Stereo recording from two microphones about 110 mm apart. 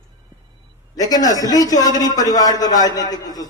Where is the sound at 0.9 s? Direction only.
35° left (ahead or behind).